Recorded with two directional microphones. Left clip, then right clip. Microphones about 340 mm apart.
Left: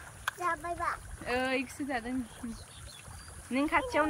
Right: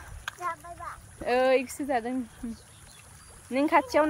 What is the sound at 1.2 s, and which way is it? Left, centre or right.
Speech, centre.